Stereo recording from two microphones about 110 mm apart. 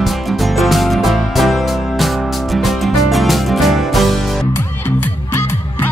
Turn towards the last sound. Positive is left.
turn(degrees=20)  # may be behind; listen again after turning